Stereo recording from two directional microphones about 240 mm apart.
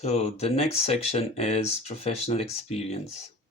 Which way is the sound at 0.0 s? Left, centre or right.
Left.